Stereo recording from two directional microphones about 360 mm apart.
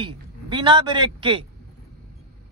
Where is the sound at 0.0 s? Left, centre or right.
Centre.